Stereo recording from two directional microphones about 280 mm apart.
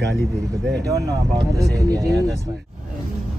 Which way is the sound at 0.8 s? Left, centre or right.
Centre.